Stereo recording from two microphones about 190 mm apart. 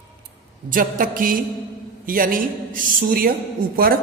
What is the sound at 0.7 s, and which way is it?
A woman's voice, 45° right (ahead or behind).